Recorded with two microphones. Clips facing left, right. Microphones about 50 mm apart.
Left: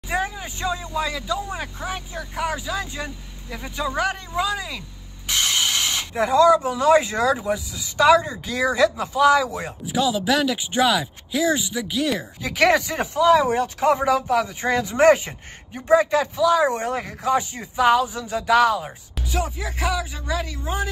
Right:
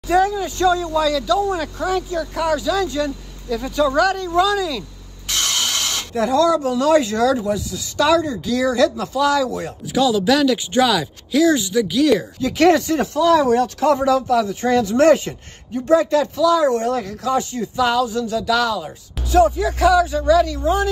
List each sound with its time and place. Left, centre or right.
0.1 s speech: left
12.4 s speech: left
19.5 s speech: left